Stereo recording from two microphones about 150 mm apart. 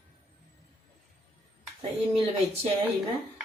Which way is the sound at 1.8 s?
40° right (ahead or behind).